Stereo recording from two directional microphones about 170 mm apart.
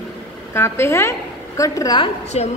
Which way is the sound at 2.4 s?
40° left (ahead or behind).